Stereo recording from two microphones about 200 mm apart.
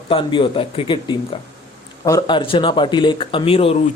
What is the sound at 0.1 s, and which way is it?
Speech, 25° left (ahead or behind).